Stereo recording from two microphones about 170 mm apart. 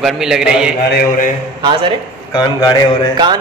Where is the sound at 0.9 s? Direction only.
55° left (ahead or behind).